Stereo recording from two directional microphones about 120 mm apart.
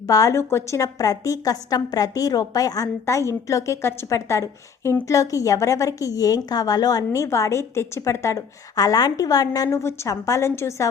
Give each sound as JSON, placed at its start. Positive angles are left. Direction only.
{"t": 0.1, "sound": "a woman's voice", "side_deg": 25}